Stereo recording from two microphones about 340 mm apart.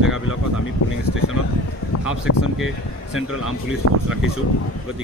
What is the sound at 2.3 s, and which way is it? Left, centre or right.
Speech, left.